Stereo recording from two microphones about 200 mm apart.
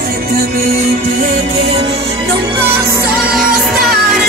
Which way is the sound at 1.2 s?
35° right (ahead or behind).